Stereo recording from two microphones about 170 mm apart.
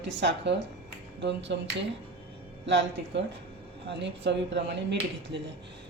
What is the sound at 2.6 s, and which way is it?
A woman's voice, 90° right.